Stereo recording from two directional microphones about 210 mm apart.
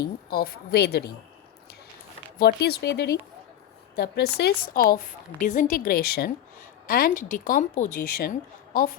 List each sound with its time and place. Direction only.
0.3 s a woman's voice: 45° left (ahead or behind)
2.4 s a woman's voice: 45° left (ahead or behind)